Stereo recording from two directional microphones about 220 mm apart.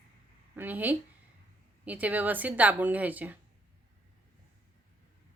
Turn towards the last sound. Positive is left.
turn(degrees=-5)  # may be behind; listen again after turning